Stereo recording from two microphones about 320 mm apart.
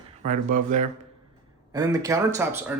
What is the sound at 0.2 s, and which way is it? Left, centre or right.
Speech, right.